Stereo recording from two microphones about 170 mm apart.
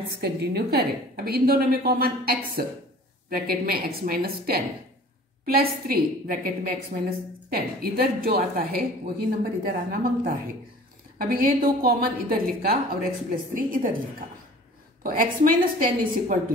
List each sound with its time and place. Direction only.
0.1 s a woman's voice: 70° right (ahead or behind); by 7.1 s 50° right (ahead or behind)
7.4 s a woman's voice: 60° right (ahead or behind)
15.0 s a woman's voice: 55° right (ahead or behind)